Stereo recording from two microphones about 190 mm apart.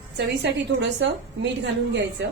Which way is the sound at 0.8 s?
70° right (ahead or behind).